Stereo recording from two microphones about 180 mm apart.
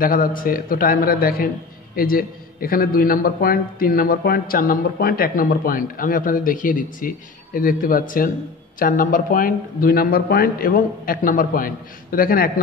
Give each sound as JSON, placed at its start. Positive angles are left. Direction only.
{"t": 0.0, "sound": "a man's voice", "side_deg": 50}